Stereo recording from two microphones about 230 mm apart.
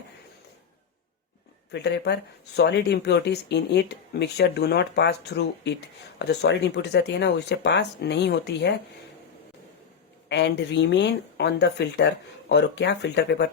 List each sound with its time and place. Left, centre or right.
1.7 s speech: left
10.2 s speech: left